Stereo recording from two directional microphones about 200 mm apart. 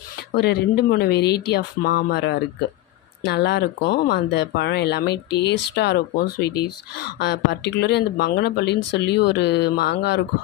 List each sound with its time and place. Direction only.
0.3 s speech: 55° left (ahead or behind)